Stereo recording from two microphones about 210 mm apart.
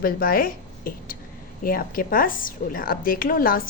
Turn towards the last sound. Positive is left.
turn(degrees=45)  # may be behind; listen again after turning